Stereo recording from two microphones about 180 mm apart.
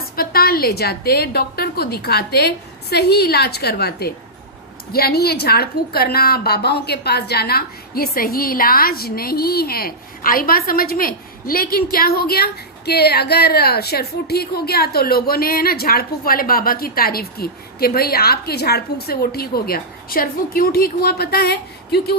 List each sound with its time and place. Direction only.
0.2 s a woman's voice: 55° left (ahead or behind)